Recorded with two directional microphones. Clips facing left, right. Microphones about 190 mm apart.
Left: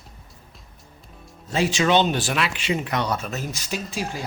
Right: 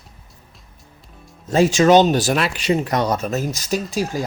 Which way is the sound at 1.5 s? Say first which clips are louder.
Right 7 dB; 45° right (ahead or behind).